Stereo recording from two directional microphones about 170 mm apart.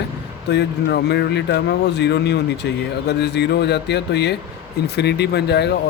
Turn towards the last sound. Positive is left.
turn(degrees=75)  # may be behind; listen again after turning